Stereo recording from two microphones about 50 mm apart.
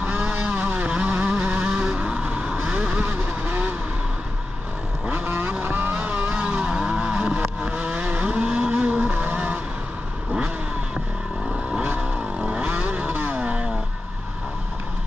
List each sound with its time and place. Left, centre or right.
0.0 s vehicle: right
5.1 s vehicle: right
6.3 s vehicle: right
12.0 s vehicle: centre